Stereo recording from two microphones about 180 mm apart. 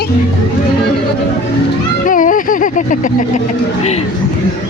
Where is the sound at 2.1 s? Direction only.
45° left (ahead or behind).